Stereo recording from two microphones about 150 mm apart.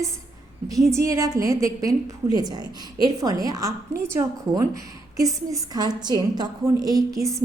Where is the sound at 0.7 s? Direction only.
20° right (ahead or behind).